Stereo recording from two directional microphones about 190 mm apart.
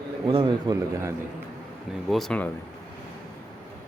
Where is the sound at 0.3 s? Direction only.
25° right (ahead or behind).